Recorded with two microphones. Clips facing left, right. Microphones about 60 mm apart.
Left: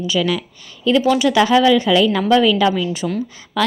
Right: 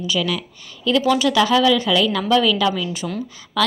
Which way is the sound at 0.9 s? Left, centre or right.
Left.